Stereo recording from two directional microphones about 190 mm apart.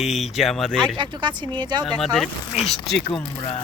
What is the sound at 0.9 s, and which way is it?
Speech, 25° right (ahead or behind).